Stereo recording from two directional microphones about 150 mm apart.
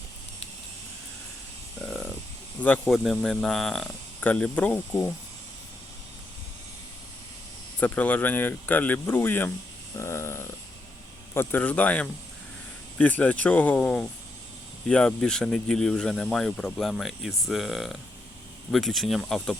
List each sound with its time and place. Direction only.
1.8 s a sound: centre (ahead or behind)
2.6 s speech: 10° left (ahead or behind)
2.9 s speech: centre (ahead or behind)
7.8 s speech: 10° left (ahead or behind)
10.0 s a sound: 20° left (ahead or behind)
11.3 s speech: 10° left (ahead or behind)